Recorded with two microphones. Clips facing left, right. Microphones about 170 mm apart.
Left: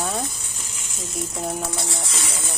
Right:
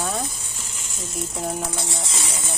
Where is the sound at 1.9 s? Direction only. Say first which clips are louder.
Even; 20° right (ahead or behind).